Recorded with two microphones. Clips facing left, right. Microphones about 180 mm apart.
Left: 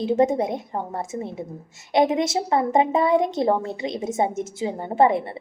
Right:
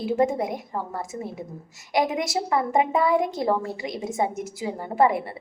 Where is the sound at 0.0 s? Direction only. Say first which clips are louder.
Left 3 dB; 20° left (ahead or behind).